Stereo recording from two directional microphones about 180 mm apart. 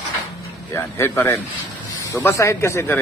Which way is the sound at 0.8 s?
15° left (ahead or behind).